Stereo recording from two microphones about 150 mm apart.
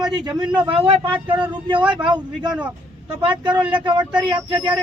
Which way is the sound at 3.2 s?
30° right (ahead or behind).